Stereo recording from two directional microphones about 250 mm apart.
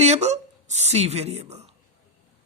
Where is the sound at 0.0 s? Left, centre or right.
Right.